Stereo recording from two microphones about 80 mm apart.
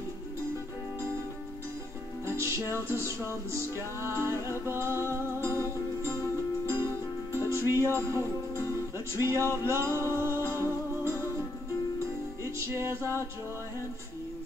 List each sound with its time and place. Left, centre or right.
2.2 s music: right
7.3 s music: right
12.5 s music: right